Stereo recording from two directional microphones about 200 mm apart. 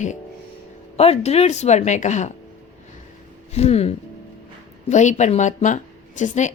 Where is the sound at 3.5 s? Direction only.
30° left (ahead or behind).